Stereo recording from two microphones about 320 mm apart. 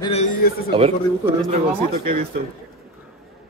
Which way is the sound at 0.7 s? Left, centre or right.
Centre.